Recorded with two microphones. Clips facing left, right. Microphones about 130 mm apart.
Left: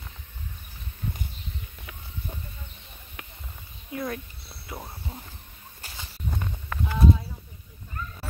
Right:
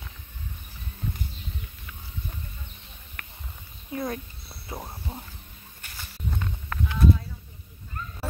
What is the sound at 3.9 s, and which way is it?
Speech, 30° right (ahead or behind).